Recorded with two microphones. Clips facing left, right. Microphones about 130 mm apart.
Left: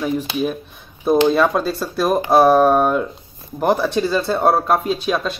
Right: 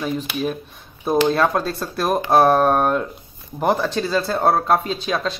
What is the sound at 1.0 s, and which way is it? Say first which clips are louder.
Speech: left 3 dB; 5° left (ahead or behind).